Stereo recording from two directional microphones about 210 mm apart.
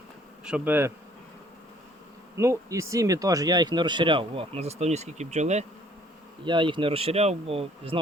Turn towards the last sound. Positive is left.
turn(degrees=-25)  # may be behind; listen again after turning